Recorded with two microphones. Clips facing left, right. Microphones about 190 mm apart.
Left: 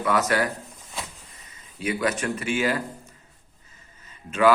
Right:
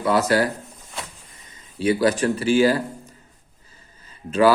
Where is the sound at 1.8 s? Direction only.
30° right (ahead or behind).